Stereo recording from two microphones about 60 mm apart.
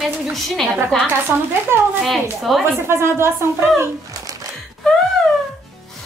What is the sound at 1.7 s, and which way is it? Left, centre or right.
Speech, right.